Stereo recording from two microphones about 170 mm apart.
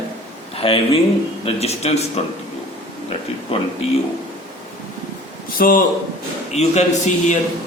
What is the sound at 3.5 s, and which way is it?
Speech, 35° left (ahead or behind).